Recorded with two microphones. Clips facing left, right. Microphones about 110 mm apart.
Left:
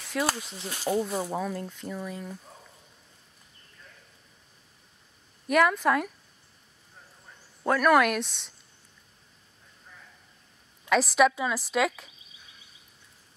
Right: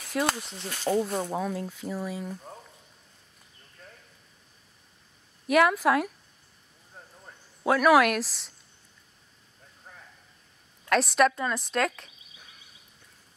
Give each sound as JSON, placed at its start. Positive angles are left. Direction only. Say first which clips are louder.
{"t": 0.0, "sound": "speech", "louder": "right 1 dB", "side_deg": 0}
{"t": 5.5, "sound": "speech", "louder": "right 1 dB", "side_deg": -5}
{"t": 7.6, "sound": "speech", "louder": "right 1 dB", "side_deg": -5}
{"t": 9.9, "sound": "a sound", "louder": "right 3 dB", "side_deg": -50}
{"t": 10.9, "sound": "speech", "louder": "left 1 dB", "side_deg": 0}